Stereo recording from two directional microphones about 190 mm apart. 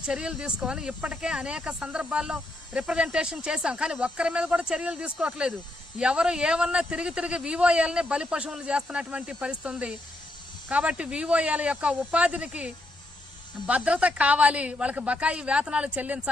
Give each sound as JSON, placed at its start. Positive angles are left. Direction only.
{"t": 0.0, "sound": "a woman's voice", "side_deg": -5}